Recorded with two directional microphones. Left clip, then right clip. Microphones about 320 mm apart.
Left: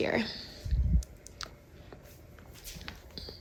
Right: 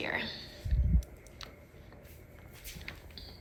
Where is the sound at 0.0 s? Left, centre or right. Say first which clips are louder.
Left 4 dB; centre.